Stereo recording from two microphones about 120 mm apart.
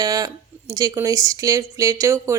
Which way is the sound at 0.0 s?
30° right (ahead or behind).